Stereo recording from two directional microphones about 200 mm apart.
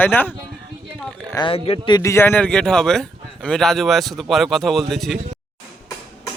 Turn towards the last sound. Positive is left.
turn(degrees=0)  # may be behind; listen again after turning